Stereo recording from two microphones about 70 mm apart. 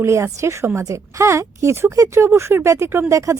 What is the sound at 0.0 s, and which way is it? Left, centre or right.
Speech, right.